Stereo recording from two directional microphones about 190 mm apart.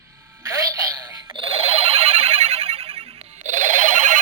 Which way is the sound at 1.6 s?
30° right (ahead or behind).